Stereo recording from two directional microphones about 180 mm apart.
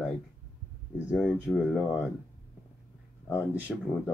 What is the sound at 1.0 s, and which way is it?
Speech, 5° right (ahead or behind).